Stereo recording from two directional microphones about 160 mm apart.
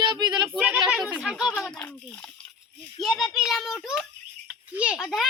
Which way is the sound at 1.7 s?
10° left (ahead or behind).